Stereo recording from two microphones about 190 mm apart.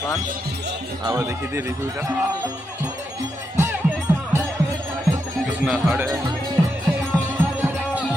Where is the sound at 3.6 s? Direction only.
15° right (ahead or behind).